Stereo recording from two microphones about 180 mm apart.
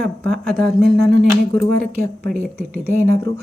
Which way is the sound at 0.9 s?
60° right (ahead or behind).